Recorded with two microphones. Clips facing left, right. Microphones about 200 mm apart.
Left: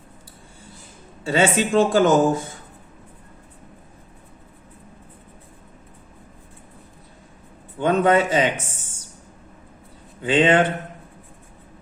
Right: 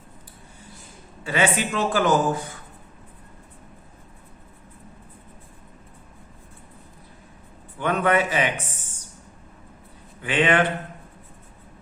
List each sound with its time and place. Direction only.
1.2 s speech: 25° left (ahead or behind)
7.8 s speech: 25° left (ahead or behind)
10.2 s speech: 25° left (ahead or behind)